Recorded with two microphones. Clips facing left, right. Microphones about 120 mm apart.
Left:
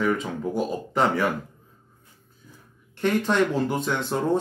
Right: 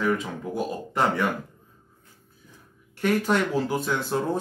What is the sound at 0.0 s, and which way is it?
Speech, centre (ahead or behind).